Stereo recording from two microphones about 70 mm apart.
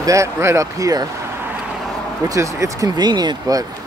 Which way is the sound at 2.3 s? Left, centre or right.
Right.